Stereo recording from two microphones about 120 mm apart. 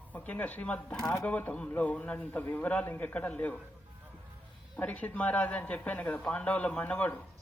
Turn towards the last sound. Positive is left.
turn(degrees=10)  # may be behind; listen again after turning